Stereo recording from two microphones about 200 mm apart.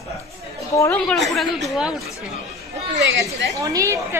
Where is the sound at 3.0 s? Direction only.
65° right (ahead or behind).